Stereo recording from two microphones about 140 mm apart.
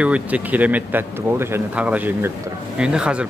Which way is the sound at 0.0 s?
10° right (ahead or behind).